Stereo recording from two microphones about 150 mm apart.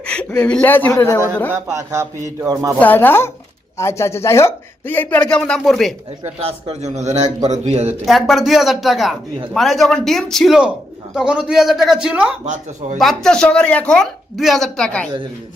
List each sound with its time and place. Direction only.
0.0 s a woman's voice: 5° left (ahead or behind)
1.5 s speech: 20° right (ahead or behind)
2.7 s speech: 10° left (ahead or behind)
6.4 s a man's voice: 45° right (ahead or behind)
8.0 s a man's voice: centre (ahead or behind)